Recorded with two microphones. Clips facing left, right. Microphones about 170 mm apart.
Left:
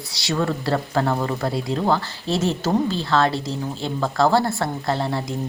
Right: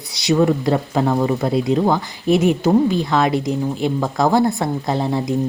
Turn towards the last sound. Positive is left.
turn(degrees=-15)  # may be behind; listen again after turning